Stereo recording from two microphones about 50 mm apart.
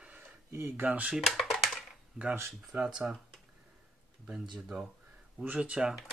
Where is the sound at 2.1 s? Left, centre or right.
Centre.